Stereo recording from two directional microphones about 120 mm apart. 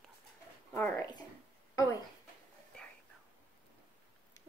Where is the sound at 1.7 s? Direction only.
30° left (ahead or behind).